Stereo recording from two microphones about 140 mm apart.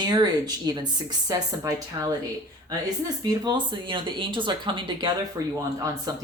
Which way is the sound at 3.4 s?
30° right (ahead or behind).